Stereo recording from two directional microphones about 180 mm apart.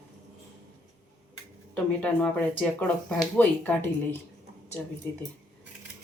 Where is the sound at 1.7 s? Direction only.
10° left (ahead or behind).